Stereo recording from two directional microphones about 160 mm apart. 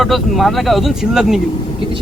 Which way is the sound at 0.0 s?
Centre (ahead or behind).